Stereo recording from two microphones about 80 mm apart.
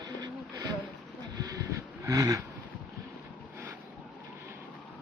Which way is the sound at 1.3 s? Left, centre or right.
Right.